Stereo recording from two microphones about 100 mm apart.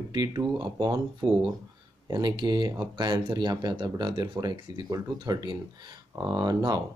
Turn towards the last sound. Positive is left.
turn(degrees=-40)  # may be behind; listen again after turning